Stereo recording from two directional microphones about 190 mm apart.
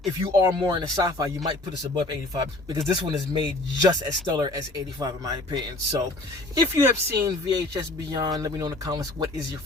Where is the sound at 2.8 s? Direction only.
20° right (ahead or behind).